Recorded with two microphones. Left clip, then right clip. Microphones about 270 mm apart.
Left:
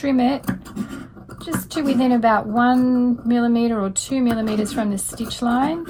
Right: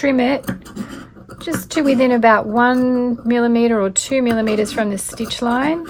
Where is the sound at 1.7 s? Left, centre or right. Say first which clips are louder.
Right 5 dB; right.